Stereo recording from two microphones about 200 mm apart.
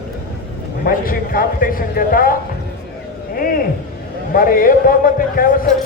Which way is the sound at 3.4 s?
45° left (ahead or behind).